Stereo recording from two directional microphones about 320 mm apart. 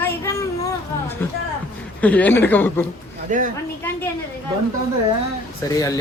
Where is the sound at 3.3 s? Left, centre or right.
Right.